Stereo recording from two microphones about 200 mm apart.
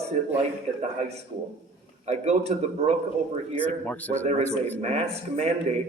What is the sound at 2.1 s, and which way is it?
Speech, 35° right (ahead or behind).